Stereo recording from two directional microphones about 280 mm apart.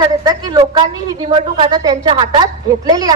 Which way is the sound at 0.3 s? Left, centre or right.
Centre.